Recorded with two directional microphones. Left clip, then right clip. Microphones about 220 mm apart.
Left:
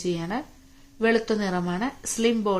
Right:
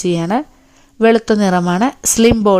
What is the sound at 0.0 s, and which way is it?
Speech, 50° right (ahead or behind).